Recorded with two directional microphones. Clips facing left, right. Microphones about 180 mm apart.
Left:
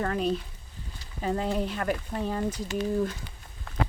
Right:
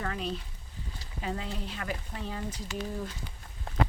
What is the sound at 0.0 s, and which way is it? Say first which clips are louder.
Speech: left 7 dB; 50° left (ahead or behind).